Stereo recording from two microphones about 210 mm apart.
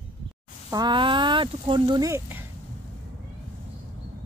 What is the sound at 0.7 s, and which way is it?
Speech, 20° right (ahead or behind).